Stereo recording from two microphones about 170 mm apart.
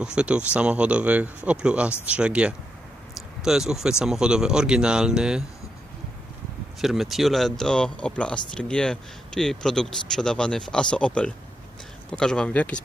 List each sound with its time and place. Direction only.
0.0 s speech: 5° right (ahead or behind)
6.8 s speech: centre (ahead or behind)